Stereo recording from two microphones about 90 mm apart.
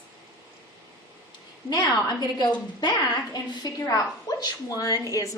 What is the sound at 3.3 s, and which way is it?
A woman's voice, 45° left (ahead or behind).